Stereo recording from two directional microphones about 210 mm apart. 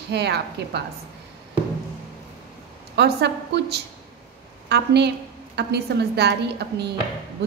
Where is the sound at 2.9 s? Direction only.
55° right (ahead or behind).